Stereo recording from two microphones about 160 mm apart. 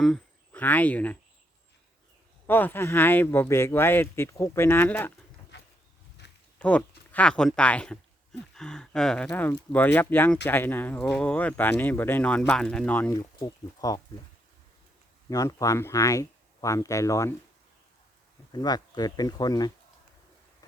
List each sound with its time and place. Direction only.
0.0 s speech: 5° left (ahead or behind)
2.5 s speech: 10° left (ahead or behind)
6.2 s a sound: 90° left
6.6 s speech: 10° left (ahead or behind)
13.4 s speech: 20° left (ahead or behind)
15.3 s speech: 20° left (ahead or behind)
18.5 s speech: 25° left (ahead or behind)